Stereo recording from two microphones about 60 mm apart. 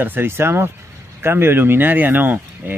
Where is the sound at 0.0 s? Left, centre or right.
Right.